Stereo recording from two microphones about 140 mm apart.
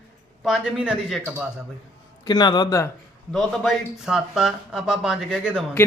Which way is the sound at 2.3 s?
30° left (ahead or behind).